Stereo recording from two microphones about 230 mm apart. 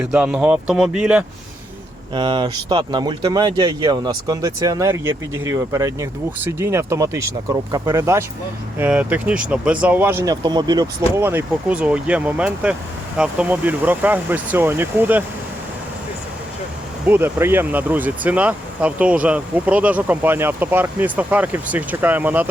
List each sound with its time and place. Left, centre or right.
0.0 s speech: centre
2.1 s speech: centre
17.1 s speech: centre